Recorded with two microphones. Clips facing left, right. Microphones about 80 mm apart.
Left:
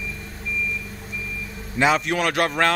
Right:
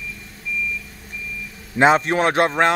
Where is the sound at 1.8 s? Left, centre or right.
Right.